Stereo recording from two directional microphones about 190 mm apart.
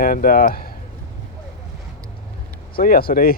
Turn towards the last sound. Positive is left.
turn(degrees=50)  # may be behind; listen again after turning